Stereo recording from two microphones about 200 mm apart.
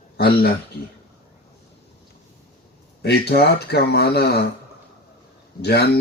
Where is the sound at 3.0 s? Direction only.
55° left (ahead or behind).